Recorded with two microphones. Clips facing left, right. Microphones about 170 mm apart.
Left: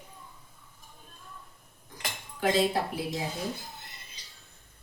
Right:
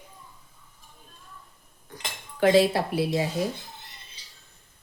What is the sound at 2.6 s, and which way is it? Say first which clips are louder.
Speech: right 6 dB; 75° right (ahead or behind).